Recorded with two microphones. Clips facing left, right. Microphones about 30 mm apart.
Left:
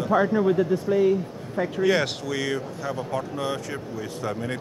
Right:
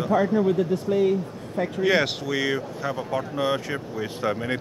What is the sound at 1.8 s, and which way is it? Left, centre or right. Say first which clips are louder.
Speech: right 1 dB; centre.